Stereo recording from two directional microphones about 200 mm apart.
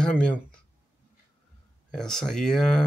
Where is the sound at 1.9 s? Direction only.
Centre (ahead or behind).